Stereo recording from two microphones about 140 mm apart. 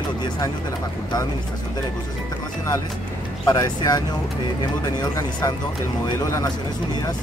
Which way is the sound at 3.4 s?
25° left (ahead or behind).